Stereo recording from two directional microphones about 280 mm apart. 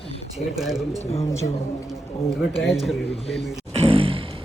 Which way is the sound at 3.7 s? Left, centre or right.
Right.